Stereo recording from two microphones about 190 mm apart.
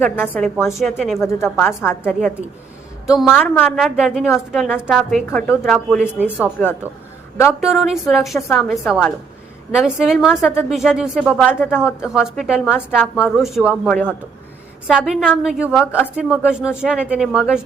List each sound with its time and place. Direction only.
0.0 s a woman's voice: 10° left (ahead or behind)
1.2 s a woman's voice: 15° left (ahead or behind)
2.0 s a woman's voice: centre (ahead or behind)
6.1 s speech: 10° right (ahead or behind)
7.6 s a woman's voice: centre (ahead or behind)